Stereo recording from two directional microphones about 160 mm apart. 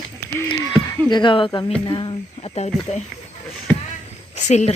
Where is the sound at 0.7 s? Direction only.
25° left (ahead or behind).